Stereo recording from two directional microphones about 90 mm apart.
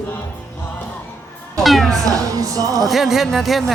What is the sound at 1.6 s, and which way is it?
Music, centre (ahead or behind).